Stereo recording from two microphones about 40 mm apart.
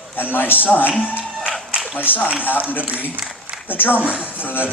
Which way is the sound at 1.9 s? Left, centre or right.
Left.